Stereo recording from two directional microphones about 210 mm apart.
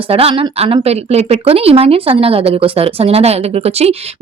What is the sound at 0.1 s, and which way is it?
Speech, 30° right (ahead or behind).